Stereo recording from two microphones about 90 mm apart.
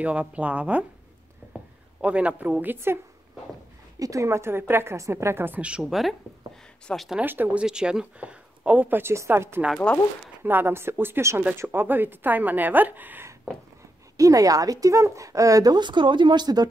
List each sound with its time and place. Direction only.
0.0 s speech: 15° right (ahead or behind)
1.4 s a sound: 20° right (ahead or behind)
2.0 s speech: 15° right (ahead or behind)
4.0 s a woman's voice: 35° right (ahead or behind); by 6.1 s centre (ahead or behind)
7.2 s a woman's voice: 20° right (ahead or behind)
14.1 s speech: 40° right (ahead or behind)